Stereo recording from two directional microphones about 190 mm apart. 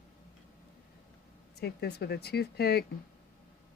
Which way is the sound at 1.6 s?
60° left (ahead or behind).